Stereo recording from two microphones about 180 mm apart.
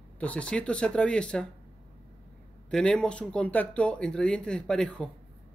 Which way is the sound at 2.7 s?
5° left (ahead or behind).